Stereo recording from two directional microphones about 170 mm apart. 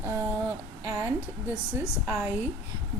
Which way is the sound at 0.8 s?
15° right (ahead or behind).